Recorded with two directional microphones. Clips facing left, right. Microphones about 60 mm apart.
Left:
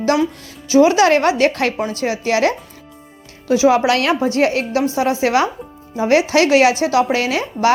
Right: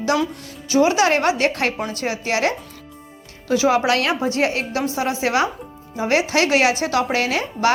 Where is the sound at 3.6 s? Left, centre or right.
Left.